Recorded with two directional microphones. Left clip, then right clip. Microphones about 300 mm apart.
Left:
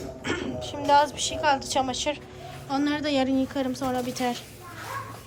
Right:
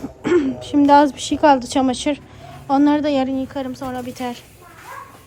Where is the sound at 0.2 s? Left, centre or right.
Centre.